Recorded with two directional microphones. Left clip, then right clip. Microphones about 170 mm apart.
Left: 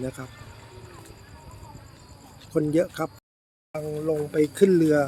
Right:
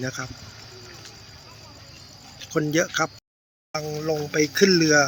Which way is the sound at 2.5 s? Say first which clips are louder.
Right 1 dB; 5° left (ahead or behind).